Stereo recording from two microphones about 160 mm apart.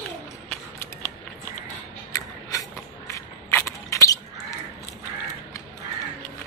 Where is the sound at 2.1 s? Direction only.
25° left (ahead or behind).